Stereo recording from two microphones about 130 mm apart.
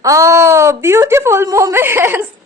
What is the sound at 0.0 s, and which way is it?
Speech, 25° right (ahead or behind).